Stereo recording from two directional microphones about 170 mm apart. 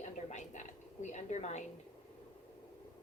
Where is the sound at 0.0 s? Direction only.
45° left (ahead or behind).